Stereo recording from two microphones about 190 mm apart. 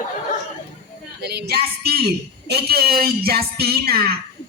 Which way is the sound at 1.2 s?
60° right (ahead or behind).